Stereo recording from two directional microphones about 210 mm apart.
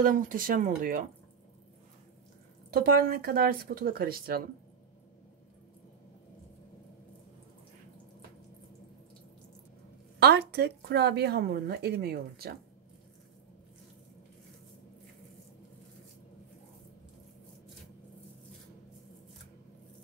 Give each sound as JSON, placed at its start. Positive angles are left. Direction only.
{"t": 0.0, "sound": "speech", "side_deg": -40}
{"t": 2.7, "sound": "speech", "side_deg": -45}
{"t": 10.1, "sound": "speech", "side_deg": -50}